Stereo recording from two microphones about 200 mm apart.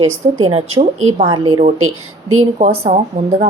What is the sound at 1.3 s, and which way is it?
Speech, 25° right (ahead or behind).